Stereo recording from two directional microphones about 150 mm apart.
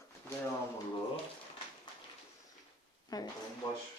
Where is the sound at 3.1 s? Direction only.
25° left (ahead or behind).